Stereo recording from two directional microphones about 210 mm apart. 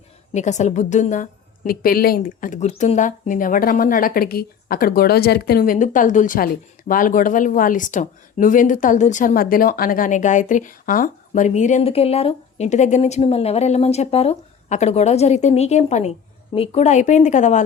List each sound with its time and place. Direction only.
0.3 s a woman's voice: 35° left (ahead or behind)